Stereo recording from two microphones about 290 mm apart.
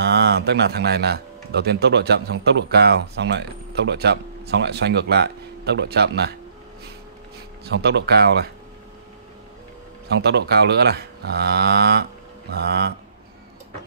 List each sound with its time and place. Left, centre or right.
0.0 s speech: right
7.6 s speech: right
10.1 s speech: right